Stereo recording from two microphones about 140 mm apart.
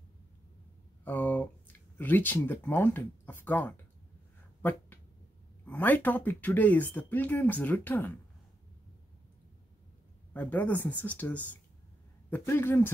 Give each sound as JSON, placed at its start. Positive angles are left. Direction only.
{"t": 1.0, "sound": "speech", "side_deg": 10}
{"t": 4.6, "sound": "a sound", "side_deg": 15}
{"t": 5.7, "sound": "speech", "side_deg": 10}
{"t": 10.3, "sound": "speech", "side_deg": 10}